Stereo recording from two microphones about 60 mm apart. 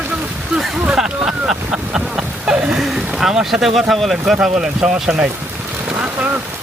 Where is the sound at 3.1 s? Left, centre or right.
Centre.